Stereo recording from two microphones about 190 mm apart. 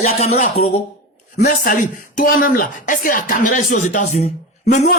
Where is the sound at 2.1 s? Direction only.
50° left (ahead or behind).